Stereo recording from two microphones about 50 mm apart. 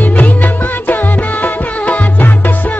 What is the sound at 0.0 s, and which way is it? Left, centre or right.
Music, left.